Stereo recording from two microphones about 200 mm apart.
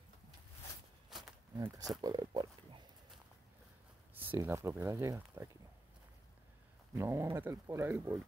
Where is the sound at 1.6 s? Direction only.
20° right (ahead or behind).